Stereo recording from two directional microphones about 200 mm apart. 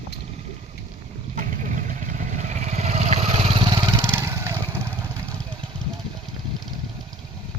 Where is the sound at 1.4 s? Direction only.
40° right (ahead or behind); by 4.5 s 10° right (ahead or behind).